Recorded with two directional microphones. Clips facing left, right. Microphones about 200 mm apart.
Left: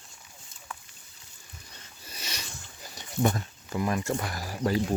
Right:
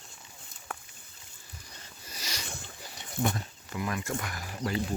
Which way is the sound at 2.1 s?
25° left (ahead or behind).